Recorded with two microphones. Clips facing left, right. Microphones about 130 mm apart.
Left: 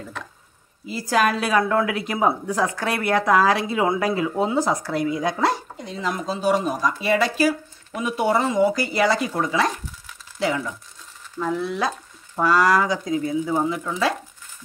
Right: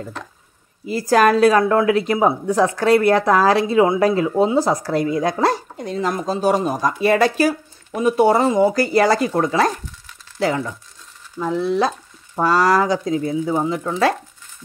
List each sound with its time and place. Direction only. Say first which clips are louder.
0.8 s speech: right 6 dB; 50° right (ahead or behind)
11.5 s stir: right 7 dB; 30° right (ahead or behind)
12.4 s speech: right 2 dB; 35° right (ahead or behind)
13.5 s stir: right 3 dB; 20° right (ahead or behind)